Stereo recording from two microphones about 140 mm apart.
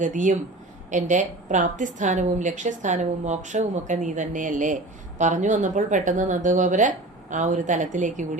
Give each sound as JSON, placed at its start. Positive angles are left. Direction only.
{"t": 0.0, "sound": "a woman's voice", "side_deg": -65}